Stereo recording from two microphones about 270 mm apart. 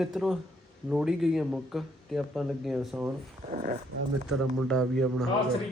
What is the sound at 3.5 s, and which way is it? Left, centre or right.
Speech, right.